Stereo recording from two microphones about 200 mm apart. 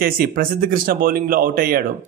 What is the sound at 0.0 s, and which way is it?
A man's voice, 45° right (ahead or behind).